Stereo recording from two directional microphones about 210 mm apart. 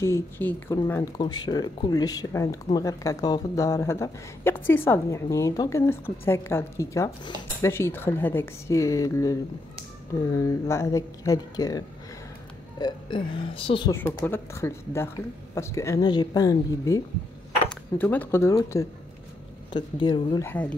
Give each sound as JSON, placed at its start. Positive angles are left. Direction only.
{"t": 0.0, "sound": "speech", "side_deg": 10}
{"t": 13.9, "sound": "speech", "side_deg": 15}
{"t": 20.4, "sound": "speech", "side_deg": 5}